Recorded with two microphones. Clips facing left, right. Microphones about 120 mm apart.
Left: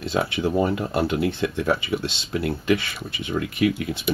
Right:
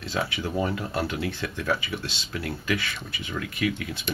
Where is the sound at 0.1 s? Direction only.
25° left (ahead or behind).